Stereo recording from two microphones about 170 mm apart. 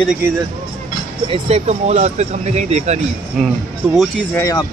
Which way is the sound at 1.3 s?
35° right (ahead or behind).